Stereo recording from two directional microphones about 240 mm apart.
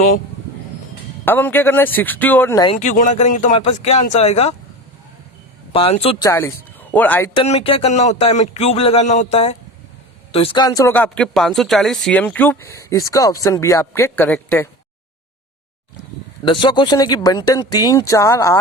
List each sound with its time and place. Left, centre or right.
1.2 s speech: centre
2.6 s speech: left
5.7 s speech: left; by 7.3 s centre
7.3 s speech: left; by 14.7 s centre
16.5 s speech: centre